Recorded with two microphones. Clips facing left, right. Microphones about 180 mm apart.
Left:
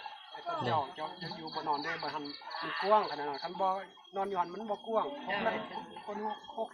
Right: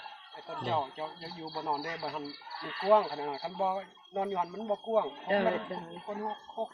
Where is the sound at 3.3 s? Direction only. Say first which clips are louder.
Right 3 dB; 20° right (ahead or behind).